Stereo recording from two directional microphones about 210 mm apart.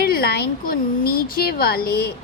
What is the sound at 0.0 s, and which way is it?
A woman's voice, 45° left (ahead or behind).